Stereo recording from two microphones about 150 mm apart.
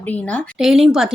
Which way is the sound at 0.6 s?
5° right (ahead or behind).